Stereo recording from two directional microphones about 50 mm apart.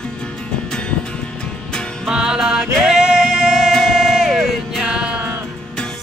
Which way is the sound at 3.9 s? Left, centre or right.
Centre.